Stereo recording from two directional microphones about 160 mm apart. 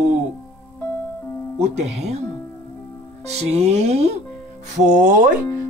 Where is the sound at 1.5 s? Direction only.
40° right (ahead or behind).